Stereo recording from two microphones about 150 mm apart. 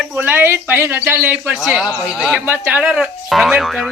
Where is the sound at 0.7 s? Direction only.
10° right (ahead or behind).